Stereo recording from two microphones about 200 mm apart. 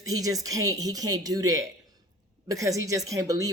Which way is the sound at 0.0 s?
15° right (ahead or behind).